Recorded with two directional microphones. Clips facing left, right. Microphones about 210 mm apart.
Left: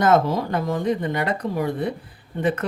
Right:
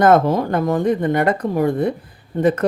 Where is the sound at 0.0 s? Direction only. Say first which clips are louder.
Right 5 dB; 55° right (ahead or behind).